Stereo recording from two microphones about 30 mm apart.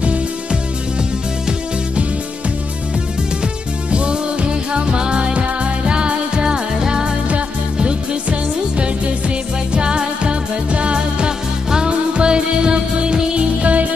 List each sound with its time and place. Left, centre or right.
3.9 s music: right
5.3 s music: right
5.9 s music: right
7.2 s music: right
13.6 s music: right